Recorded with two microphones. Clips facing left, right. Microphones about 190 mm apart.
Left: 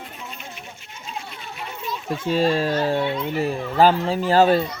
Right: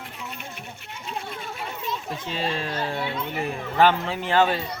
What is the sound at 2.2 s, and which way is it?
Speech, 40° left (ahead or behind).